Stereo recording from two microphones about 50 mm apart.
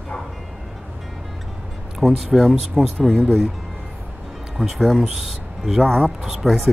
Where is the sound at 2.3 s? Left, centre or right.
Centre.